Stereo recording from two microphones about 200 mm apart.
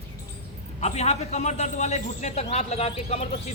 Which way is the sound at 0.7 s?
35° left (ahead or behind).